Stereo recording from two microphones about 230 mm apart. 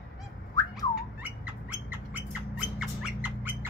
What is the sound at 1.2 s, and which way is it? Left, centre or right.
Rodents, centre.